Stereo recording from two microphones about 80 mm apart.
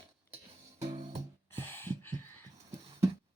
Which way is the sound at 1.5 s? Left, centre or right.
Left.